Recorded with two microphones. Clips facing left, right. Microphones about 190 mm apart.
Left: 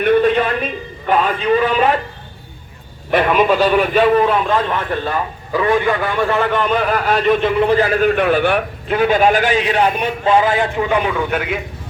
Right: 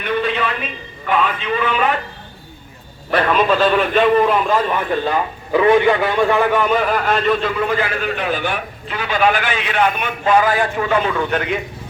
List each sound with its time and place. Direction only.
0.0 s a man's voice: 50° left (ahead or behind)
3.1 s a man's voice: 15° left (ahead or behind); by 4.8 s 5° right (ahead or behind)
4.9 s a man's voice: 15° right (ahead or behind); by 7.2 s centre (ahead or behind)
7.3 s a man's voice: 25° left (ahead or behind); by 8.1 s 40° left (ahead or behind)
8.1 s a man's voice: 55° left (ahead or behind); by 11.6 s 5° left (ahead or behind)